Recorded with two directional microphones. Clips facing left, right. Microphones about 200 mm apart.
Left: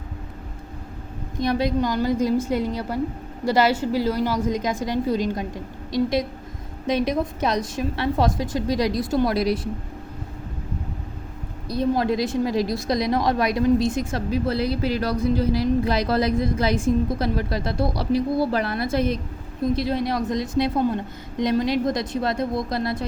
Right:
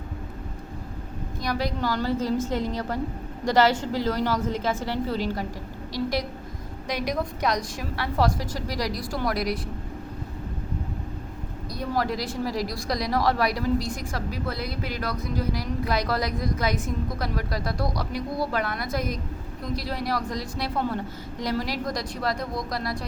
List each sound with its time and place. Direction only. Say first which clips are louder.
1.4 s a woman's voice: left 6 dB; 25° left (ahead or behind)
11.7 s a woman's voice: left 6 dB; 25° left (ahead or behind)